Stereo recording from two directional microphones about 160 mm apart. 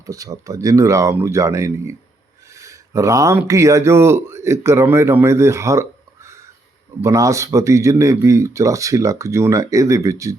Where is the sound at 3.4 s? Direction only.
20° right (ahead or behind).